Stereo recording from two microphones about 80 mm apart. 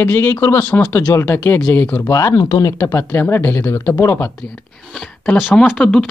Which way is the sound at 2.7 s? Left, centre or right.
Left.